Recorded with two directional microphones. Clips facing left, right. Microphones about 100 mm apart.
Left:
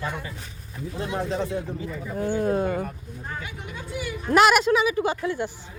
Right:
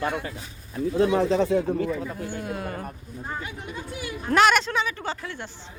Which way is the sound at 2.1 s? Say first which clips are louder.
Left 8 dB; 55° left (ahead or behind).